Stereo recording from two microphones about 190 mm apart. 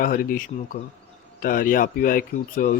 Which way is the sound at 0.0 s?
45° left (ahead or behind).